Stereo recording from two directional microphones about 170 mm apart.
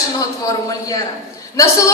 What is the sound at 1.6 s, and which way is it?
Speech, 20° left (ahead or behind).